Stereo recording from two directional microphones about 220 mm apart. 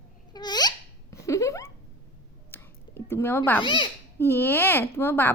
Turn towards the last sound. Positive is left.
turn(degrees=10)  # may be behind; listen again after turning